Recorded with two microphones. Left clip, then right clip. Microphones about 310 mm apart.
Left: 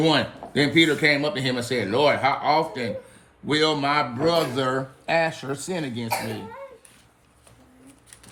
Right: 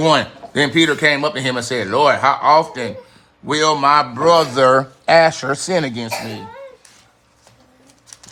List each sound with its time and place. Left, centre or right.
0.0 s speech: centre